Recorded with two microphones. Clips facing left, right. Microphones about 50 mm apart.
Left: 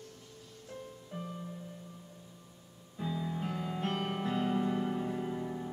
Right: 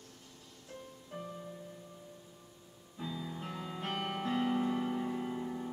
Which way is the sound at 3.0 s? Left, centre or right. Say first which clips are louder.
Left 5 dB; centre.